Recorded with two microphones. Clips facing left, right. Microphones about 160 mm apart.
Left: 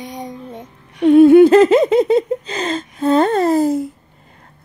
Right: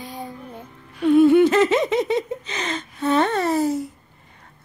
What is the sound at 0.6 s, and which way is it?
Music, 75° left (ahead or behind).